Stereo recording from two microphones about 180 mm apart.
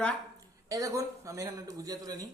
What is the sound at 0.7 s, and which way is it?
Speech, 20° right (ahead or behind).